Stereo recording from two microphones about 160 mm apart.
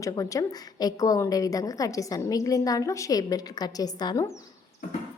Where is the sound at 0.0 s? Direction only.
20° left (ahead or behind).